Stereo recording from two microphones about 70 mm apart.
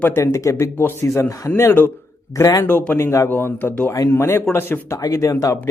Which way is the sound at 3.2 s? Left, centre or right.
Left.